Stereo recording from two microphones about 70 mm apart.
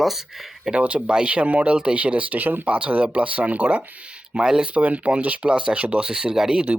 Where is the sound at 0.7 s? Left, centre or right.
Centre.